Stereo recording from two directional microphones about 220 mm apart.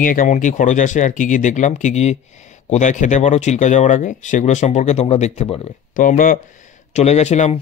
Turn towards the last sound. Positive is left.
turn(degrees=30)  # may be behind; listen again after turning